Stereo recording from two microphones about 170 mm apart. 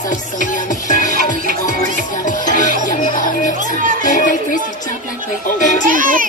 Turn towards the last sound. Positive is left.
turn(degrees=-55)  # may be behind; listen again after turning